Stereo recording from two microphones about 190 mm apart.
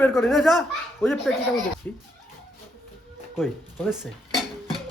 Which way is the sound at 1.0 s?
10° left (ahead or behind).